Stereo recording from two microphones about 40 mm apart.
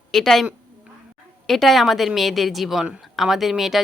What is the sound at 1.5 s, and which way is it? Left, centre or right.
Speech, centre.